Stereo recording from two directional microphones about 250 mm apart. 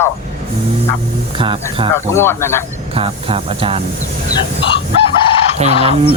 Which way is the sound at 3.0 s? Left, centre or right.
Right.